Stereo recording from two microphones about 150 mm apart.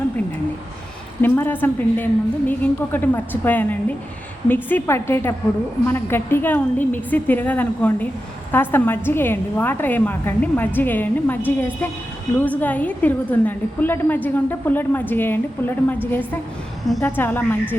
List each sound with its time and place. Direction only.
1.2 s a woman's voice: 15° left (ahead or behind)
17.0 s a woman's voice: 15° left (ahead or behind)